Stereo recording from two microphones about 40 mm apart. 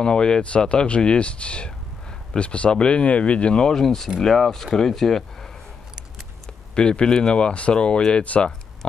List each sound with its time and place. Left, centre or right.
0.0 s speech: left
3.7 s speech: centre
6.7 s speech: left